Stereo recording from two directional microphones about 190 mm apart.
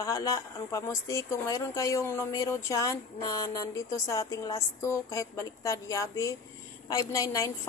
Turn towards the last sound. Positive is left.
turn(degrees=15)  # may be behind; listen again after turning